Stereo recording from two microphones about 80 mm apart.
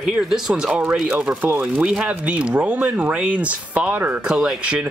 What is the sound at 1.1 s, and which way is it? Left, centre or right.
Speech, centre.